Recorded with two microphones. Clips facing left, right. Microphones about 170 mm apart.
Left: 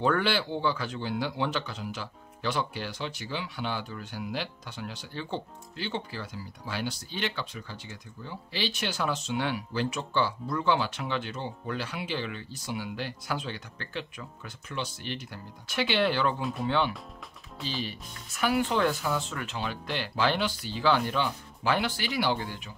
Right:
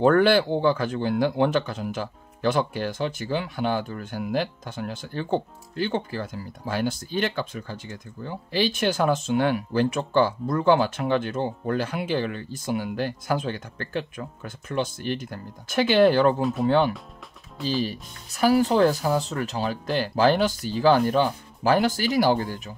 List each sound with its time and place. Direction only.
0.0 s speech: 50° right (ahead or behind)
17.6 s speech: centre (ahead or behind)
17.8 s speech: 35° right (ahead or behind)